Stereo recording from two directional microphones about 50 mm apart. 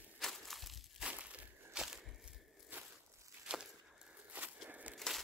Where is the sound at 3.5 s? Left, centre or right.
Right.